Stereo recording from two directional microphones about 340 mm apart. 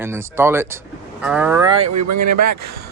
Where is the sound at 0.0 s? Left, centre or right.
Centre.